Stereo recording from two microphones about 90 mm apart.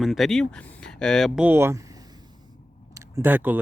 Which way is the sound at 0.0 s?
Centre (ahead or behind).